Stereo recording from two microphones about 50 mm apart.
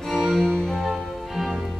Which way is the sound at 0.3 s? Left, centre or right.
Centre.